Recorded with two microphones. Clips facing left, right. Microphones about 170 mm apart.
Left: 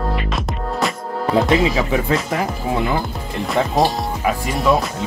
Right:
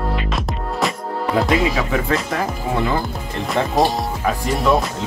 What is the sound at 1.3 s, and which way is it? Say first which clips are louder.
Speech: left 2 dB; 20° left (ahead or behind).